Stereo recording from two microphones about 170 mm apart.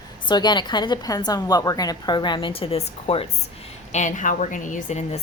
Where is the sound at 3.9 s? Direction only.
45° left (ahead or behind).